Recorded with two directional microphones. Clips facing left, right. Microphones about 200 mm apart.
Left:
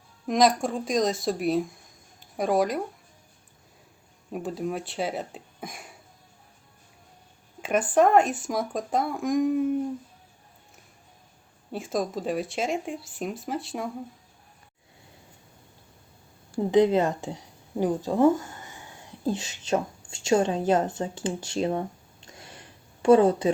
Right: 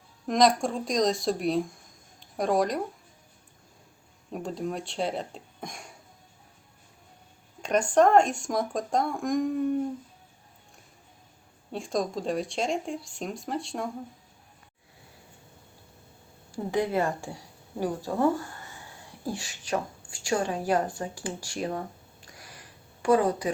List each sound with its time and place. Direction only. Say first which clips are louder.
0.3 s speech: left 1 dB; centre (ahead or behind)
4.3 s speech: left 2 dB; 5° left (ahead or behind)
7.6 s speech: even; 5° left (ahead or behind)
11.7 s speech: left 1 dB; 5° left (ahead or behind)
16.7 s a woman's voice: left 6 dB; 20° left (ahead or behind)